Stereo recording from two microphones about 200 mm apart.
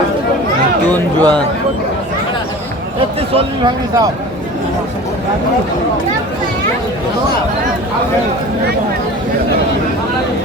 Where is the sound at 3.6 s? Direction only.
20° right (ahead or behind).